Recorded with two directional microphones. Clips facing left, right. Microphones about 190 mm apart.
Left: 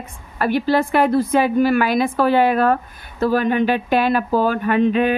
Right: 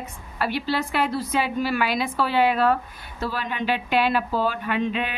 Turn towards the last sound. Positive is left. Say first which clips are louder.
# left 9 dB
turn(degrees=50)  # may be behind; listen again after turning